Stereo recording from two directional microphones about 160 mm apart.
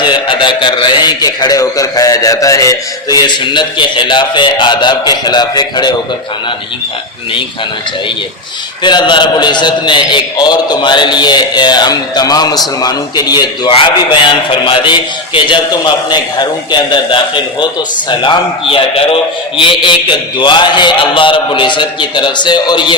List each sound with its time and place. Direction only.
0.0 s a man's voice: 30° left (ahead or behind)
8.8 s a man's voice: 30° left (ahead or behind)